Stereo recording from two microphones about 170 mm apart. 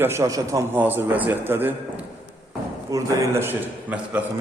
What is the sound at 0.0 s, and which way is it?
A man's voice, 15° right (ahead or behind).